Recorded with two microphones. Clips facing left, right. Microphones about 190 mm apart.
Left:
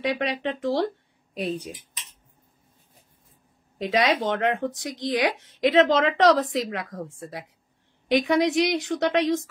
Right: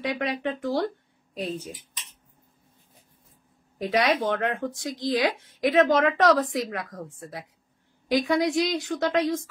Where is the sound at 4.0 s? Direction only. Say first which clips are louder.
Left 1 dB; 20° left (ahead or behind).